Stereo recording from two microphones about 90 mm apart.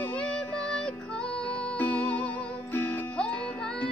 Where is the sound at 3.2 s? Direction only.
10° left (ahead or behind).